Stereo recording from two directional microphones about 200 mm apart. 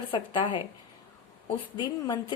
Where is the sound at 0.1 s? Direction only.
25° left (ahead or behind).